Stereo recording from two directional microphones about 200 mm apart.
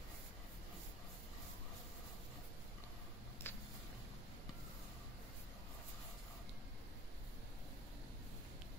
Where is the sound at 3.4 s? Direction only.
10° left (ahead or behind).